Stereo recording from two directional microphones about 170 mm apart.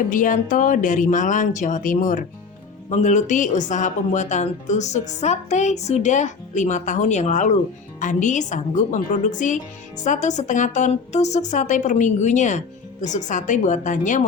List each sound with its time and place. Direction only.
0.1 s speech: 50° left (ahead or behind)